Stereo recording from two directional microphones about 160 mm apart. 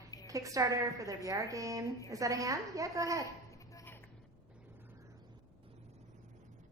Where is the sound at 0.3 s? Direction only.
20° right (ahead or behind).